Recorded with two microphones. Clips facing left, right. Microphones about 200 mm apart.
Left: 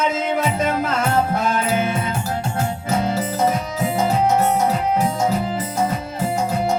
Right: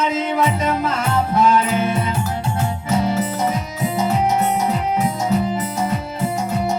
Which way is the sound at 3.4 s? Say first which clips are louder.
Left 2 dB; 50° left (ahead or behind).